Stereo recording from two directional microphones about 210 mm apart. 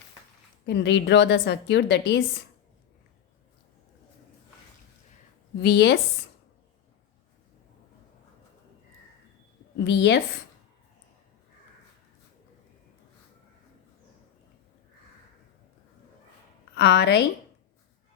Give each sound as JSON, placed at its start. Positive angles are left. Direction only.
{"t": 0.6, "sound": "a woman's voice", "side_deg": 55}
{"t": 5.6, "sound": "a woman's voice", "side_deg": 50}
{"t": 9.7, "sound": "a woman's voice", "side_deg": 55}
{"t": 16.7, "sound": "a woman's voice", "side_deg": 55}